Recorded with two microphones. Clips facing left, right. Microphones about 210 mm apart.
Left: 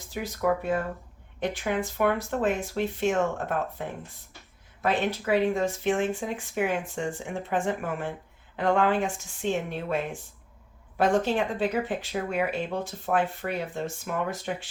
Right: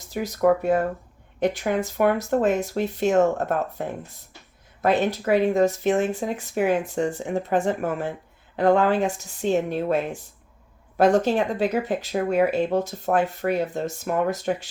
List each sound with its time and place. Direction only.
0.1 s speech: 40° right (ahead or behind)